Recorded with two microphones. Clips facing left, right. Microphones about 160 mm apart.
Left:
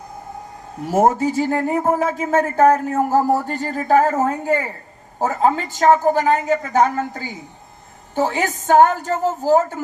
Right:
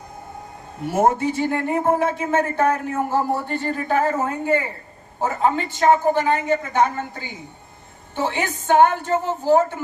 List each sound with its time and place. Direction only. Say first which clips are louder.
0.9 s speech: left 2 dB; 40° left (ahead or behind)